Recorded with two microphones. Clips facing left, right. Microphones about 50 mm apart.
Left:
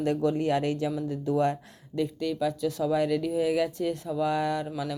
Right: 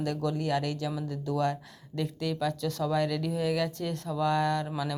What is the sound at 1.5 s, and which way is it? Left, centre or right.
Speech, centre.